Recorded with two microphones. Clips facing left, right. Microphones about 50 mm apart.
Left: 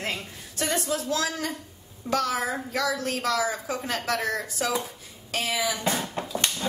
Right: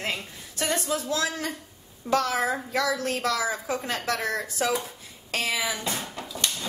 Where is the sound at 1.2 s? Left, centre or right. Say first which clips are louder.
Even; right.